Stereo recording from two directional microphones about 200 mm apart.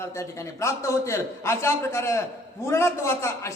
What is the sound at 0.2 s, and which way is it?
A man's voice, 15° left (ahead or behind).